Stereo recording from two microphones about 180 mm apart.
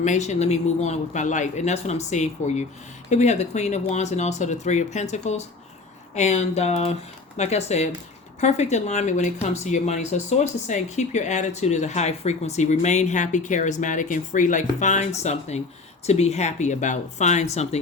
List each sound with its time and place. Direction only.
0.0 s speech: 40° left (ahead or behind)